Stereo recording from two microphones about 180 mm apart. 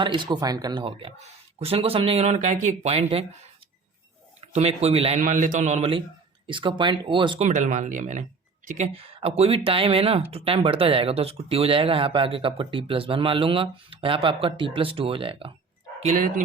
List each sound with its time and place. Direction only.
0.0 s speech: 25° right (ahead or behind)
4.4 s a man's voice: 35° right (ahead or behind)
5.2 s speech: 45° right (ahead or behind); by 7.4 s 25° right (ahead or behind)
7.4 s speech: 45° right (ahead or behind); by 15.5 s 30° right (ahead or behind)
16.0 s speech: 45° right (ahead or behind)